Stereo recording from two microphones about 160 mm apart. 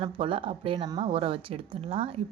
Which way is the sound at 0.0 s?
35° right (ahead or behind).